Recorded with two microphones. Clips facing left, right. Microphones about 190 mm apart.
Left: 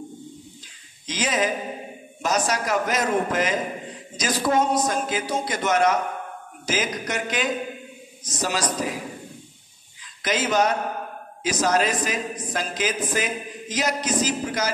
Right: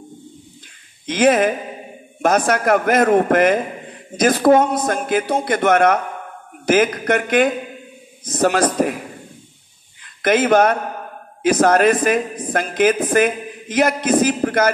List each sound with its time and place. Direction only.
1.0 s a man's voice: 55° right (ahead or behind)
10.0 s a man's voice: 55° right (ahead or behind)